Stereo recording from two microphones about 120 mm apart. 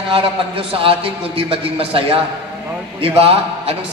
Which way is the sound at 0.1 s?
50° right (ahead or behind).